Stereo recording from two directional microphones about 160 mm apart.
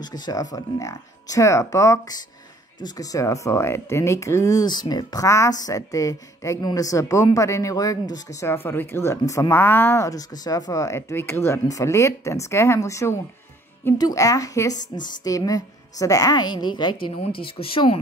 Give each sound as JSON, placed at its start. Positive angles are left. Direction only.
{"t": 0.0, "sound": "speech", "side_deg": 25}